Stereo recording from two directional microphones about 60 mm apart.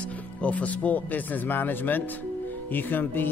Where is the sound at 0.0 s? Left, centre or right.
Left.